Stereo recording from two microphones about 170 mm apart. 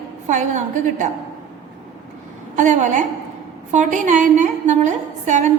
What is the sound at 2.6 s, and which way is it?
A woman's voice, 45° right (ahead or behind).